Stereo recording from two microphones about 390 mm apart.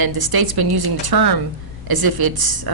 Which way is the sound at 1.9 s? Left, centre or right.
Right.